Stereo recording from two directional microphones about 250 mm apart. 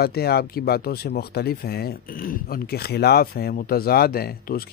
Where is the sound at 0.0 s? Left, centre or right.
Left.